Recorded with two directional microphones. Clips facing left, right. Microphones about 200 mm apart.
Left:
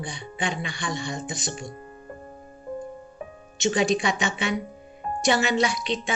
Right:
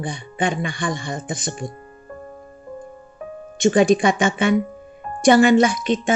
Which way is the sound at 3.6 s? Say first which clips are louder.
Right 8 dB; 50° right (ahead or behind).